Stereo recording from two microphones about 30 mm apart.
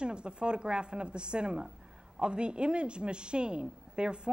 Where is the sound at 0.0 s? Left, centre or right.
Right.